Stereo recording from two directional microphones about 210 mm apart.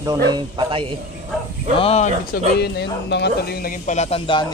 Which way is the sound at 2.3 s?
50° left (ahead or behind).